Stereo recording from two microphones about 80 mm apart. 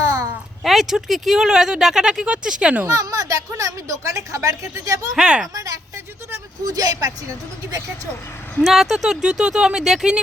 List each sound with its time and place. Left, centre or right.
0.0 s a sound: right
0.6 s speech: centre
2.8 s speech: right
5.1 s speech: centre
6.7 s speech: right
8.6 s speech: centre